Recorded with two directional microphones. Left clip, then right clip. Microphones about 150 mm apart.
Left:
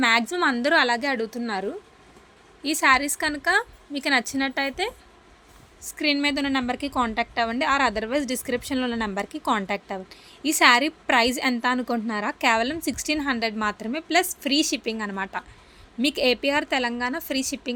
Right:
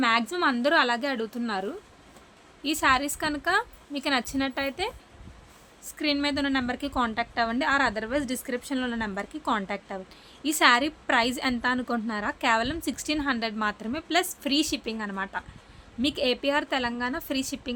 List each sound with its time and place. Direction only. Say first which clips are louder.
0.0 s a woman's voice: left 3 dB; 15° left (ahead or behind)